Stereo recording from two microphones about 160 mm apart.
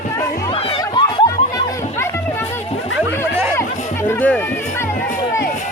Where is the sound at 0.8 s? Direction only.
25° left (ahead or behind).